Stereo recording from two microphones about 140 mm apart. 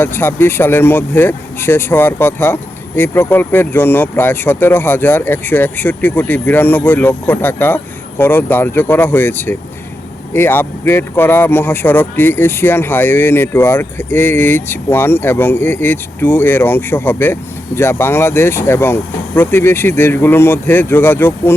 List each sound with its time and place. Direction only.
0.0 s speech: 15° left (ahead or behind)